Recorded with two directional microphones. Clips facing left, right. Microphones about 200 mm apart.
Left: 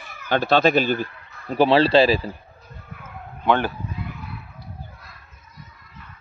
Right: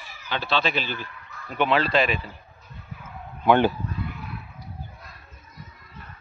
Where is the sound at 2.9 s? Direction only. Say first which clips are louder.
Even; 55° left (ahead or behind).